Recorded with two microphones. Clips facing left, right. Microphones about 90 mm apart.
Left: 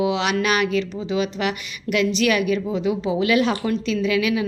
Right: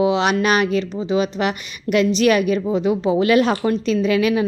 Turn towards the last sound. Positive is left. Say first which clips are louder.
# right 3 dB
turn(degrees=-40)  # may be behind; listen again after turning